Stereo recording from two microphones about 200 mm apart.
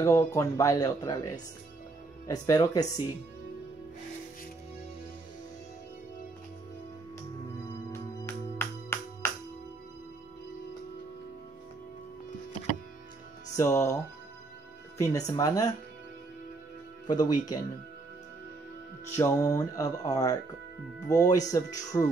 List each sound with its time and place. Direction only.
0.0 s speech: 15° left (ahead or behind)
7.9 s music: 10° left (ahead or behind)
13.6 s speech: 15° left (ahead or behind)
15.0 s speech: 15° left (ahead or behind)
17.1 s speech: 20° left (ahead or behind)
19.1 s speech: 15° left (ahead or behind)